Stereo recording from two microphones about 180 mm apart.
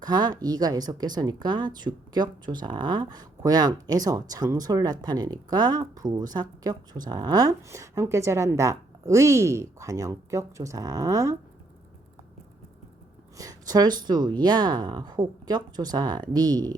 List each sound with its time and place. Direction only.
0.0 s speech: 25° right (ahead or behind)
13.3 s speech: 20° right (ahead or behind)